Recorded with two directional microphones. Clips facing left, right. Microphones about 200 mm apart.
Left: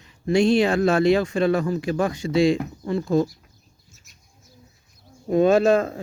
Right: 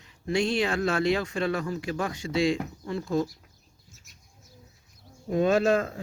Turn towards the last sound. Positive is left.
turn(degrees=30)  # may be behind; listen again after turning